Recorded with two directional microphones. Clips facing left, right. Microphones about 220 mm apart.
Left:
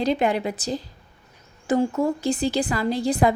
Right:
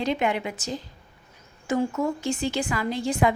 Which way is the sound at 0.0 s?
35° left (ahead or behind).